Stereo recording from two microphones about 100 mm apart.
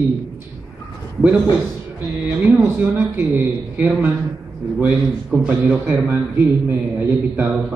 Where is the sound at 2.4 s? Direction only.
25° right (ahead or behind).